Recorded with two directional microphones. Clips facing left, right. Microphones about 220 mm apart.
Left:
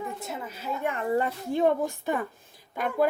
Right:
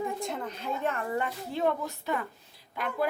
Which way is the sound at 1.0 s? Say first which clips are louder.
Left 5 dB; 35° left (ahead or behind).